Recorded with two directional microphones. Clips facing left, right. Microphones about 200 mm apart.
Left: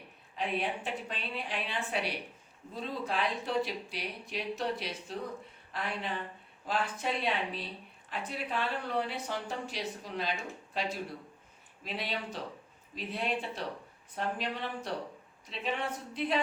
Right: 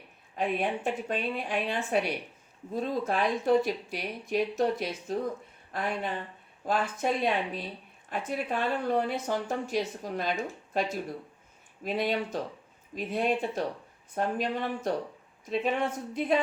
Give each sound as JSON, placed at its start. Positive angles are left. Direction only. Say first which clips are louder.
{"t": 0.3, "sound": "a woman's voice", "louder": "right 5 dB", "side_deg": -45}